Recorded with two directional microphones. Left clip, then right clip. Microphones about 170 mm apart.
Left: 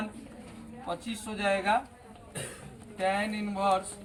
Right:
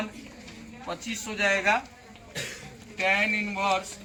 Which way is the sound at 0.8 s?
20° left (ahead or behind).